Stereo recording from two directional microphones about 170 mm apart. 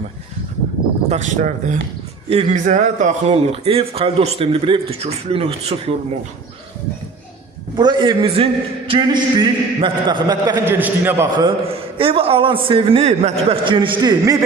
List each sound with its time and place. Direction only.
1.1 s a man's voice: 45° right (ahead or behind)
7.8 s a man's voice: 25° right (ahead or behind)
10.8 s a man's voice: 10° right (ahead or behind)
11.3 s a man's voice: 30° right (ahead or behind)